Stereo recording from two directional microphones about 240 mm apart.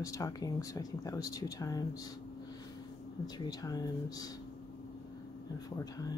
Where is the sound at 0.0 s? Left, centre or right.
Centre.